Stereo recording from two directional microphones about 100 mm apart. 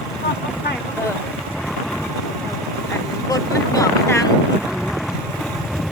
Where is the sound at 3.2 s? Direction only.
40° left (ahead or behind).